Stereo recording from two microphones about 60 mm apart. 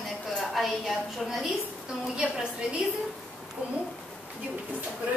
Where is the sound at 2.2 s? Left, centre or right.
Centre.